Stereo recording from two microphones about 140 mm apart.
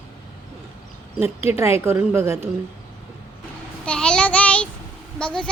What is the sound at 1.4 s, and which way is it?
Speech, 15° right (ahead or behind).